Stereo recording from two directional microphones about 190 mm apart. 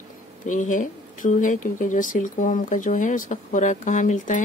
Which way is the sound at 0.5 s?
40° left (ahead or behind).